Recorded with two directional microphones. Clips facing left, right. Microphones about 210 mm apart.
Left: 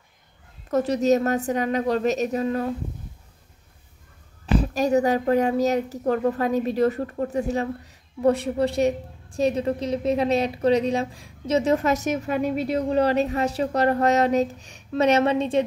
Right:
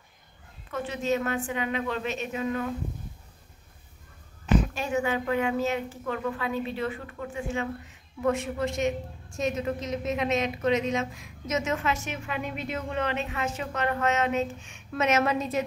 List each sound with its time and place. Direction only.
0.7 s speech: 40° left (ahead or behind)
4.6 s speech: 40° left (ahead or behind)